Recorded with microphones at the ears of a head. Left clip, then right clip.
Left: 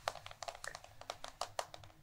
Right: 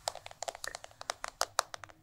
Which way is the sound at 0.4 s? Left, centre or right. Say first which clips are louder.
Right 6 dB; right.